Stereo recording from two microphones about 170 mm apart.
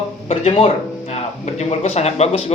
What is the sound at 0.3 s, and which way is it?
Speech, 40° left (ahead or behind).